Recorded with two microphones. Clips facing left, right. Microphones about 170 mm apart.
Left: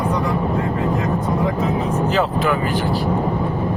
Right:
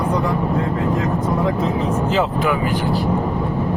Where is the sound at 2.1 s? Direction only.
20° right (ahead or behind).